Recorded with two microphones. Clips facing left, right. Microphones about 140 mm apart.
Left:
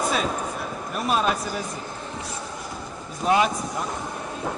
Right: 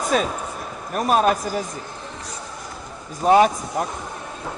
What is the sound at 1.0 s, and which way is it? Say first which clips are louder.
Speech: right 5 dB; 45° right (ahead or behind).